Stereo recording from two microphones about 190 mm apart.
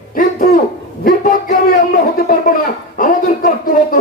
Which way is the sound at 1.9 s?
45° left (ahead or behind).